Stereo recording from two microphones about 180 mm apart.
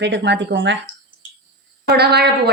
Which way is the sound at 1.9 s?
65° right (ahead or behind).